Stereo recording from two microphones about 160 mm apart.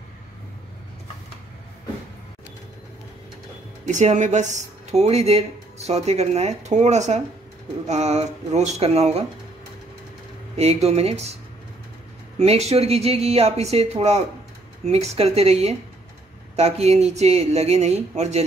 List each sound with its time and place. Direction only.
3.8 s speech: 50° right (ahead or behind)
10.5 s speech: 40° right (ahead or behind)
12.4 s speech: 40° right (ahead or behind)